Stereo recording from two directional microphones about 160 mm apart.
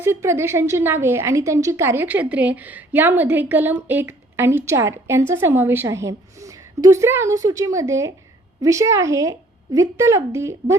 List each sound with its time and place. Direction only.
0.0 s a woman's voice: 15° right (ahead or behind)